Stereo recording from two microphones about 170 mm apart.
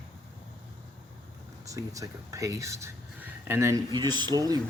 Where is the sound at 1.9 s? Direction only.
20° right (ahead or behind).